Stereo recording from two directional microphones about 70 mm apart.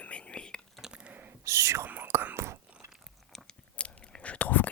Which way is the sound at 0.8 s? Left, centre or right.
Centre.